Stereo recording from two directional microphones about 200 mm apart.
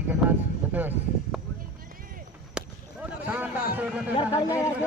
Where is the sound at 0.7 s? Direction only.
10° right (ahead or behind).